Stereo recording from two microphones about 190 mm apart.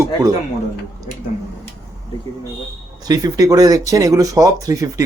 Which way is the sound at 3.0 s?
20° right (ahead or behind).